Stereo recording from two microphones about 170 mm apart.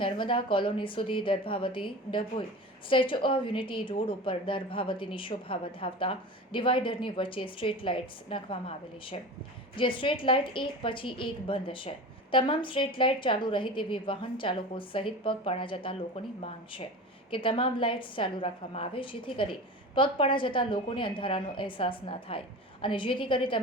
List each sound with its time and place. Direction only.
0.0 s a woman's voice: 30° left (ahead or behind)